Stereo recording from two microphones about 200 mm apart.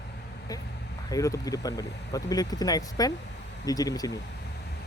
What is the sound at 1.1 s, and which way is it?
Speech, 15° left (ahead or behind).